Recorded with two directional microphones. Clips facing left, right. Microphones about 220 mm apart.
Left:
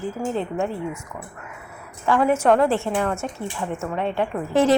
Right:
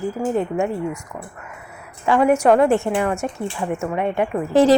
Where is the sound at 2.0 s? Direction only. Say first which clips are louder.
Right 3 dB; 15° right (ahead or behind).